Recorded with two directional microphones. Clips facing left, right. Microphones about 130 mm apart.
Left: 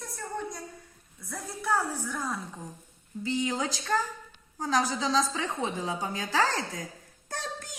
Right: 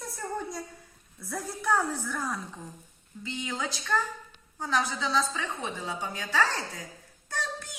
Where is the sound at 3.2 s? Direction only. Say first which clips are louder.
Left 5 dB; 35° left (ahead or behind).